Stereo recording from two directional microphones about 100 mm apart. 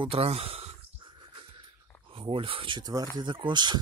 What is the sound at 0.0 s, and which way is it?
Speech, 80° right.